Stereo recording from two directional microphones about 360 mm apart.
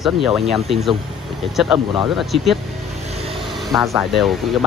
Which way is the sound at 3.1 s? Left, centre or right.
Centre.